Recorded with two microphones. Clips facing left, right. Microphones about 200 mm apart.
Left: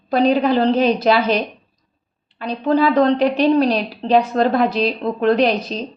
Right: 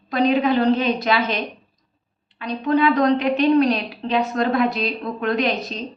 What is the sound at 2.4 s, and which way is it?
A woman's voice, 30° left (ahead or behind).